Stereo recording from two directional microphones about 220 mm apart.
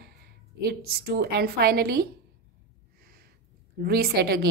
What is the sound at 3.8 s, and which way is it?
Speech, 45° right (ahead or behind).